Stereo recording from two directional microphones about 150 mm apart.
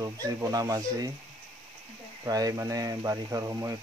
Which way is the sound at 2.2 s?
25° right (ahead or behind).